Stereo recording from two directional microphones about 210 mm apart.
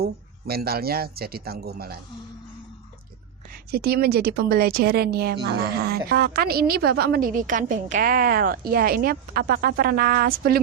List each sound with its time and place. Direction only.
0.0 s a woman's voice: 45° right (ahead or behind)
3.7 s a woman's voice: 45° right (ahead or behind)